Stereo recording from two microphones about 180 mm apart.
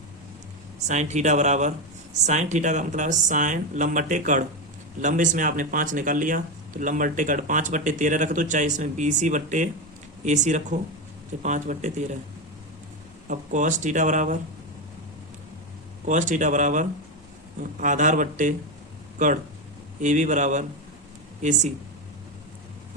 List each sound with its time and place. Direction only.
0.9 s speech: 40° right (ahead or behind)
13.2 s speech: 45° right (ahead or behind)
16.0 s speech: 45° right (ahead or behind)
20.0 s speech: 45° right (ahead or behind)